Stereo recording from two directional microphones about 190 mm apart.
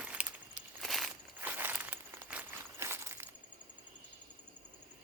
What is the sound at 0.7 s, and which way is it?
Walk, centre (ahead or behind).